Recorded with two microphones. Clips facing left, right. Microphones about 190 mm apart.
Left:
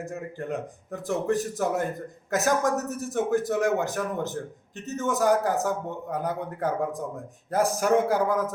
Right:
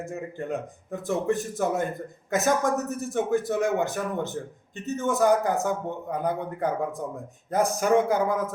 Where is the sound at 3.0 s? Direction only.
Centre (ahead or behind).